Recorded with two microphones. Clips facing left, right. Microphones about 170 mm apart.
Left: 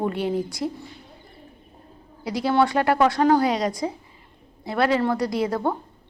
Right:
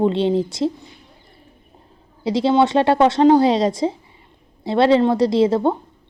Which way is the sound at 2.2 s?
25° right (ahead or behind).